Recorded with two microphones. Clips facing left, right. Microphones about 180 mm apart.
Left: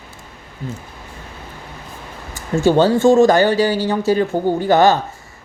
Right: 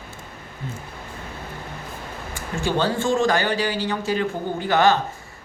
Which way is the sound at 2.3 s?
40° left (ahead or behind).